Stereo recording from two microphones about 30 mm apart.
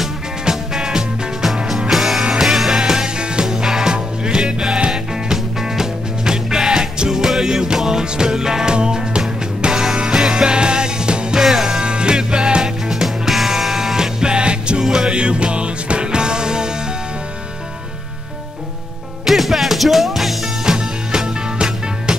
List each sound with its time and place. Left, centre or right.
0.5 s music: right
1.9 s music: centre
3.9 s music: right
9.7 s music: centre
11.3 s music: centre
11.8 s music: right
12.6 s music: centre
13.9 s music: right
19.2 s music: centre
20.6 s music: right